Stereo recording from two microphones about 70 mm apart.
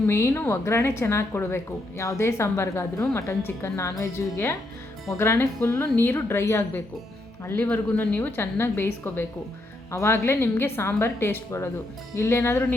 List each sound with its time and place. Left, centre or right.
0.1 s a woman's voice: left